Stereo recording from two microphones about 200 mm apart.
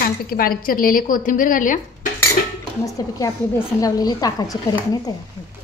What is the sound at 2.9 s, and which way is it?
A woman's voice, 15° left (ahead or behind).